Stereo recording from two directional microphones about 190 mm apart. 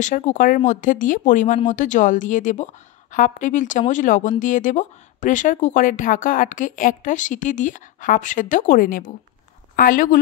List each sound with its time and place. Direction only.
0.0 s a woman's voice: 40° left (ahead or behind)